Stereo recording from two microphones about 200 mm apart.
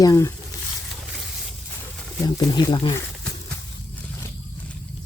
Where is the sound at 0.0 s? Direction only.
15° left (ahead or behind).